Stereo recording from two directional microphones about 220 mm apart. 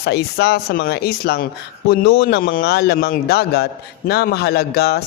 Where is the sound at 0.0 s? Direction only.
50° left (ahead or behind).